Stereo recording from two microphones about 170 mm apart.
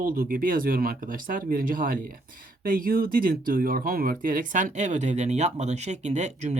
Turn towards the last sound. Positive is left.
turn(degrees=-40)  # may be behind; listen again after turning